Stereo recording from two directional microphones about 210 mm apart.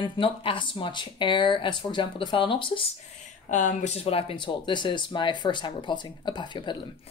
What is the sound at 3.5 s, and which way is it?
Speech, 35° left (ahead or behind).